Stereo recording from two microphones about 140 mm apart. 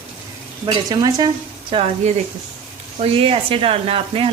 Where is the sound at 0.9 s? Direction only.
30° right (ahead or behind).